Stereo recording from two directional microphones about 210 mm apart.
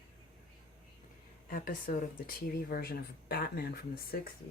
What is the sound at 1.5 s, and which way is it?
Speech, 40° left (ahead or behind).